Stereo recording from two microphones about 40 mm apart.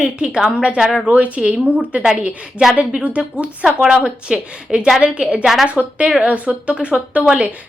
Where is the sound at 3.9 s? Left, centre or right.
Right.